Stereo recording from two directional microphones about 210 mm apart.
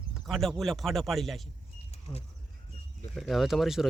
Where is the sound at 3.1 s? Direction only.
Centre (ahead or behind).